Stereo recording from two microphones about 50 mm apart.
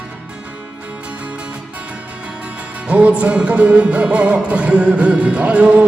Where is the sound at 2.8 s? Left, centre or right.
Right.